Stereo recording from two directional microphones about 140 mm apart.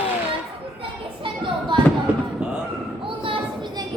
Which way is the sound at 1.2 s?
35° right (ahead or behind).